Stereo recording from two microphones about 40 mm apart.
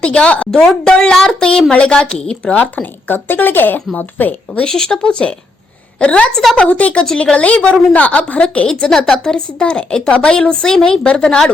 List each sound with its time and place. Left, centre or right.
0.0 s a woman's voice: left
0.5 s a woman's voice: centre
2.4 s speech: left
3.9 s speech: left
4.6 s speech: centre
5.0 s a woman's voice: left
6.3 s a woman's voice: centre
6.6 s a woman's voice: left
8.6 s a woman's voice: centre